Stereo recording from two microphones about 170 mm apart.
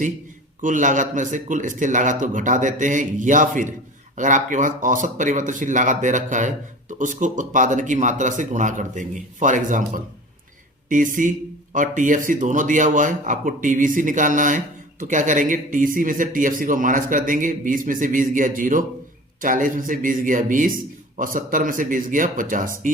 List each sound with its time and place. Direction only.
0.6 s speech: 50° right (ahead or behind)